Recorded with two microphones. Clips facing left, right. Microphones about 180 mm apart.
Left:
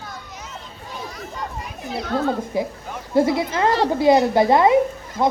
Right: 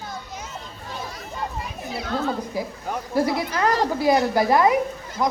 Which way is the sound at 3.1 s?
25° left (ahead or behind).